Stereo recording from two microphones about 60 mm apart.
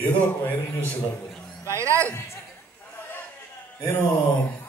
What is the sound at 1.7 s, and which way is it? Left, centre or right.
Speech, right.